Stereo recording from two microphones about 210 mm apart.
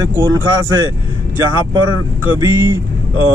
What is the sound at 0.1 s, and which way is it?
Speech, 15° right (ahead or behind).